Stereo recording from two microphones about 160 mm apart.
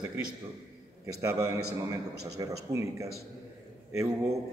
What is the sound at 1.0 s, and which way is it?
A man's voice, 20° right (ahead or behind).